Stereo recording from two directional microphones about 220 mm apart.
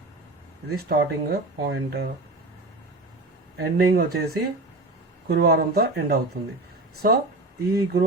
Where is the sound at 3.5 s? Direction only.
45° right (ahead or behind).